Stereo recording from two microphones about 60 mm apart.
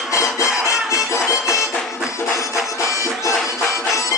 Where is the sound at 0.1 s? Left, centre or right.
Left.